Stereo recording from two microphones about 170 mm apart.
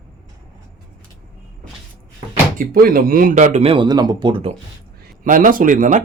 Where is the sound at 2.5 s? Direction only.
55° right (ahead or behind); by 4.5 s 30° right (ahead or behind).